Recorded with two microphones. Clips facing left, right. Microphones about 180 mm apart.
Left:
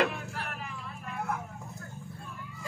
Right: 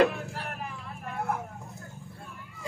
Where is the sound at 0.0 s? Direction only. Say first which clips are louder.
Right 5 dB; 40° right (ahead or behind).